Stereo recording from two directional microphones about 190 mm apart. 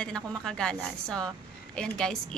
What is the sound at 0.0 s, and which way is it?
A woman's voice, 5° left (ahead or behind).